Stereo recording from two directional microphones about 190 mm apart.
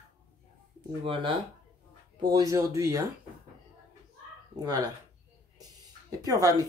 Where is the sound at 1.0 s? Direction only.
25° right (ahead or behind).